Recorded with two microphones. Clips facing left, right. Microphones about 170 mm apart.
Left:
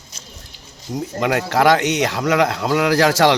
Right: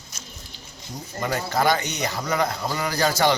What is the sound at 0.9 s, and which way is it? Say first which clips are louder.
Speech: left 8 dB; 85° left.